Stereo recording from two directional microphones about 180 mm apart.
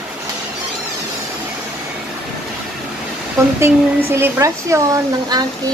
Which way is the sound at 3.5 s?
15° right (ahead or behind).